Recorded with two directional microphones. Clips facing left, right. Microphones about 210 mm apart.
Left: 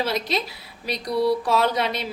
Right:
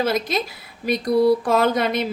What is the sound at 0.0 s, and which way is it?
Speech, 50° right (ahead or behind).